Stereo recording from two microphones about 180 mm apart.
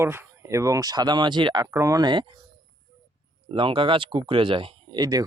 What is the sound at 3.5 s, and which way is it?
Speech, 30° right (ahead or behind).